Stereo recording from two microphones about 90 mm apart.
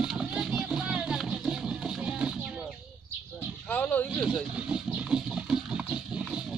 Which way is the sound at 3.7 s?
20° left (ahead or behind).